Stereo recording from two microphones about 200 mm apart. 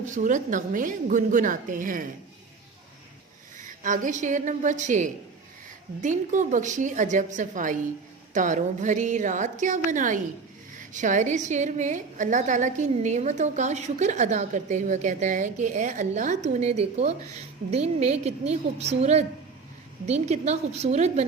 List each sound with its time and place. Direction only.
0.0 s a woman's voice: 40° right (ahead or behind)
3.8 s a woman's voice: 40° right (ahead or behind)